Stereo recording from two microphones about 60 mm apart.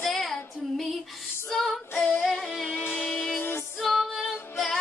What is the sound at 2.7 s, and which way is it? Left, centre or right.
Music, left.